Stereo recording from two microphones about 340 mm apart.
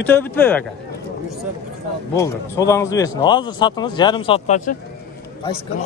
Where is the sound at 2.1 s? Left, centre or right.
Centre.